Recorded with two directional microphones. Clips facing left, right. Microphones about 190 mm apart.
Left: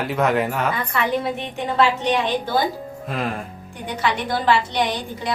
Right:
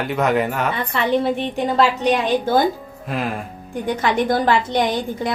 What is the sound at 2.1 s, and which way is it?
Speech, 45° right (ahead or behind).